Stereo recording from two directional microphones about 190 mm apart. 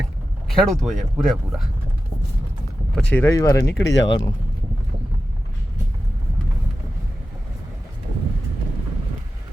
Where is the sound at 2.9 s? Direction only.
5° left (ahead or behind).